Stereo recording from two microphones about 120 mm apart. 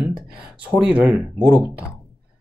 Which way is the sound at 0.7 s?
10° right (ahead or behind).